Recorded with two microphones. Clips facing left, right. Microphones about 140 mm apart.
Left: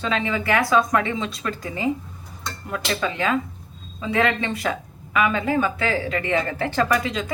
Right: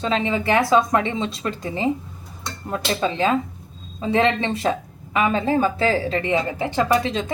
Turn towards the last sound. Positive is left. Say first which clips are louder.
# right 3 dB
turn(degrees=-30)  # may be behind; listen again after turning